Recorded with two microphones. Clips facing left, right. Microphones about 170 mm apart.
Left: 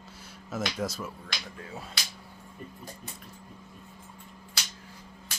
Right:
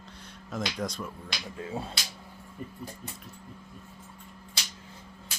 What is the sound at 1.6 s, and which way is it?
Finger snapping, 25° right (ahead or behind).